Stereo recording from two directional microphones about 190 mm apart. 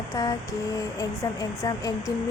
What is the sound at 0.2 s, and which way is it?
Speech, 20° left (ahead or behind).